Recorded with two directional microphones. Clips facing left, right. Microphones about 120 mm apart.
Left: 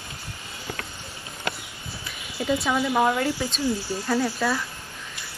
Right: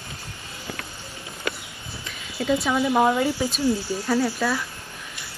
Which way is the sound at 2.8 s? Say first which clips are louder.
Right 4 dB; 15° right (ahead or behind).